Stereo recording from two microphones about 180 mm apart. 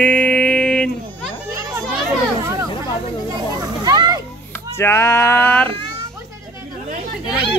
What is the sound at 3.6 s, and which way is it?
Children playing, 20° right (ahead or behind).